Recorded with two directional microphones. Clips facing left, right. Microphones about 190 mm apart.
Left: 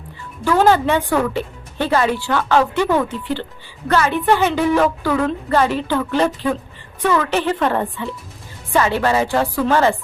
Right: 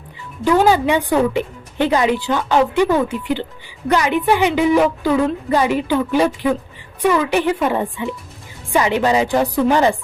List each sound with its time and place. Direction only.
0.4 s speech: 15° right (ahead or behind)